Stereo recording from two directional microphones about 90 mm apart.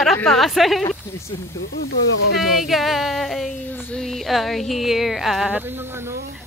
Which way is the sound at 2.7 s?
Centre (ahead or behind).